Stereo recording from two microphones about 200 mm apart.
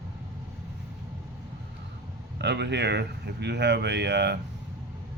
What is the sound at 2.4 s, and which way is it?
Speech, 60° right (ahead or behind).